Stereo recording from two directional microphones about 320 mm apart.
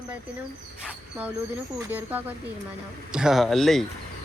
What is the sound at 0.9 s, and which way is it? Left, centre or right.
Speech, centre.